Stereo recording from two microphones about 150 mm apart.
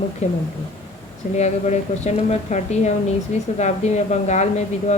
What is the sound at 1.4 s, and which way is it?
Speech, 50° left (ahead or behind).